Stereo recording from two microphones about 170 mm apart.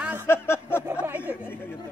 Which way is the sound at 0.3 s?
15° left (ahead or behind).